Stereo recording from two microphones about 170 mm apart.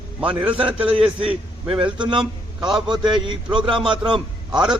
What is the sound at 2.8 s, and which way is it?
Speech, 25° right (ahead or behind).